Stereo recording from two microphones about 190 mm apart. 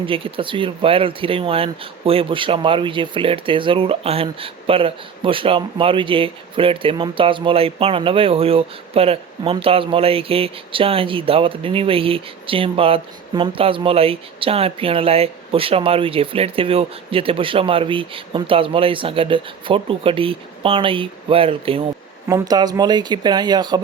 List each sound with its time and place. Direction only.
0.0 s speech: 30° right (ahead or behind)
22.3 s speech: 20° right (ahead or behind)